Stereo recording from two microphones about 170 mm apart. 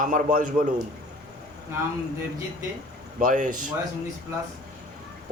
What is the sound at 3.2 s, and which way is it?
Speech, 50° right (ahead or behind).